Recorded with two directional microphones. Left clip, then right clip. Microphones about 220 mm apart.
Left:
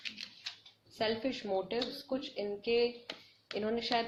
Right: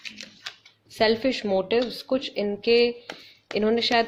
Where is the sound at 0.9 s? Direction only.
45° right (ahead or behind).